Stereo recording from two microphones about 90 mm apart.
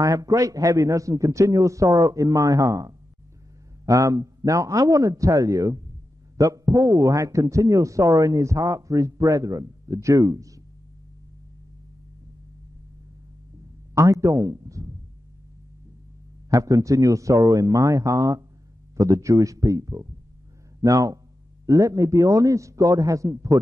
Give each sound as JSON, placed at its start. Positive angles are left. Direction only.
{"t": 0.0, "sound": "speech", "side_deg": -40}
{"t": 13.9, "sound": "speech", "side_deg": -35}
{"t": 16.4, "sound": "speech", "side_deg": -40}